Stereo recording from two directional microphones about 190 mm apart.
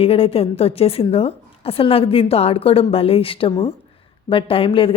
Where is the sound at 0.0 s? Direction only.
30° left (ahead or behind).